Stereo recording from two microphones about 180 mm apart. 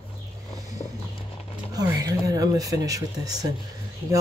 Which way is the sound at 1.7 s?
20° right (ahead or behind).